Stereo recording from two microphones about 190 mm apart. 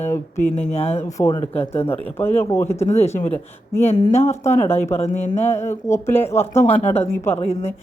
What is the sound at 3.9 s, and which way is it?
Speech, 35° left (ahead or behind).